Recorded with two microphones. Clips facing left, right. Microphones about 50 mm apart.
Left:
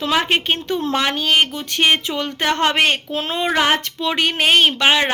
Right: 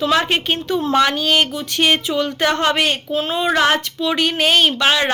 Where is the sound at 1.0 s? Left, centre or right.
Left.